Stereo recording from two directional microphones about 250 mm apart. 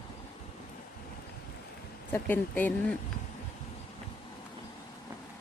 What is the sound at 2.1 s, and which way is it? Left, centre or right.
Speech, centre.